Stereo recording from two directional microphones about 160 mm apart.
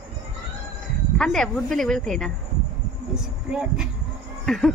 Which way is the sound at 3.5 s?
5° right (ahead or behind).